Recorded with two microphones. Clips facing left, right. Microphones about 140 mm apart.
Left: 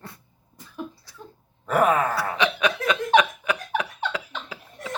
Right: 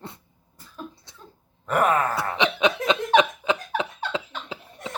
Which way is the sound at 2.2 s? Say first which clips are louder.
Right 1 dB; 20° right (ahead or behind).